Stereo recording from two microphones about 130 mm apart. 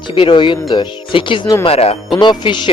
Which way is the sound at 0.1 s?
40° left (ahead or behind).